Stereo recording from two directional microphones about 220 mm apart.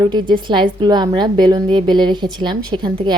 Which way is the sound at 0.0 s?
20° right (ahead or behind).